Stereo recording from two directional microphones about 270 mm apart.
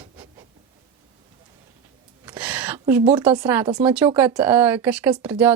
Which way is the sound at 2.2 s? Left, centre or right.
Centre.